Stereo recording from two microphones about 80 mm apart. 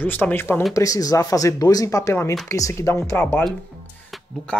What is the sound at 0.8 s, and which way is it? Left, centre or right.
Speech, left.